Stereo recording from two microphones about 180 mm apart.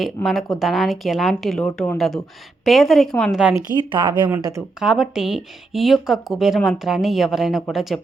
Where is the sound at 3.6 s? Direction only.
25° right (ahead or behind).